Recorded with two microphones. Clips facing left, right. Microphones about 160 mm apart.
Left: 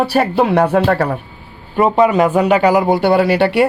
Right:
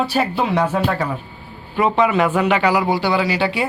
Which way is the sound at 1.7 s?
45° left (ahead or behind).